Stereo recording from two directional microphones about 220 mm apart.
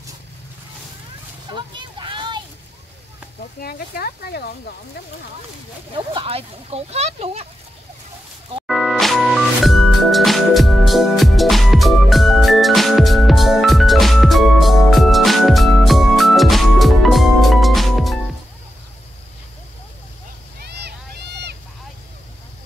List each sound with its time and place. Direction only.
1.5 s a sound: 20° right (ahead or behind)
3.6 s speech: 45° left (ahead or behind)
5.9 s speech: 25° right (ahead or behind)
8.6 s music: centre (ahead or behind)
20.6 s boat: 50° right (ahead or behind)